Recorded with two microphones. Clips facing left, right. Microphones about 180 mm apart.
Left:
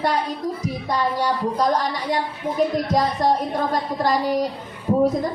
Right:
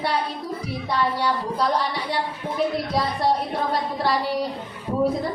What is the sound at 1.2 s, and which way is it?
A woman's voice, 45° left (ahead or behind).